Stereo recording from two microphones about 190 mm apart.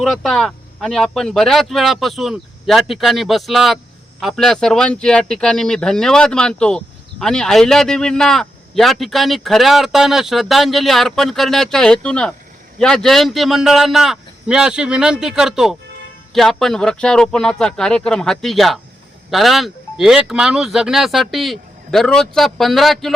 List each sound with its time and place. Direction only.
0.0 s speech: centre (ahead or behind)